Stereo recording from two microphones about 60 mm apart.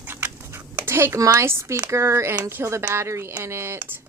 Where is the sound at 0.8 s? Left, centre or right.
Right.